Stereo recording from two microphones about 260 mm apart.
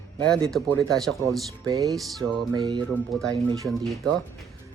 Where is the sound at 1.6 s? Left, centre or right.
Centre.